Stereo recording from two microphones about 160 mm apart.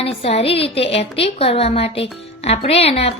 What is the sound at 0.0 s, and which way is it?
A woman's voice, 35° left (ahead or behind).